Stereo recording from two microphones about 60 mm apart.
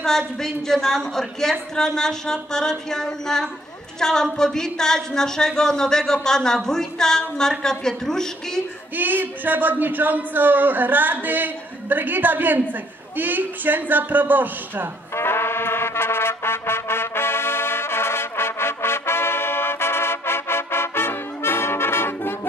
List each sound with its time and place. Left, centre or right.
0.4 s speech: centre
8.9 s speech: right
15.1 s brass instrument: left